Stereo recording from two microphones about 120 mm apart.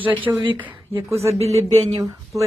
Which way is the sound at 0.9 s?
60° right (ahead or behind).